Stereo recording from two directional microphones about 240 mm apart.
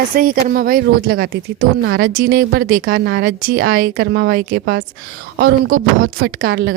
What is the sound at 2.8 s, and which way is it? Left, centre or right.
Speech, right.